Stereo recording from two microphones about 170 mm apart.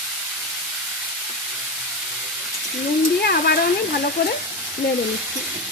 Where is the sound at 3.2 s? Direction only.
70° left (ahead or behind).